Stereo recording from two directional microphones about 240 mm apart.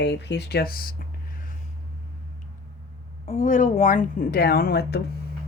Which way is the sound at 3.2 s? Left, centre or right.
Left.